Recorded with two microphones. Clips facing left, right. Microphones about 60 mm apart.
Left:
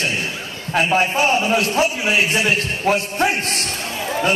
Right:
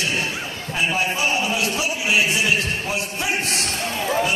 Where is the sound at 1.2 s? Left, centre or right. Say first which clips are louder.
Left 5 dB; left.